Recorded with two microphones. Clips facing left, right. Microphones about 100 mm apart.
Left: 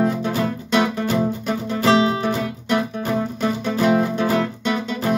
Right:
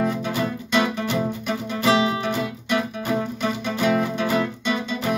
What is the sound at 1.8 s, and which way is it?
Music, 35° left (ahead or behind).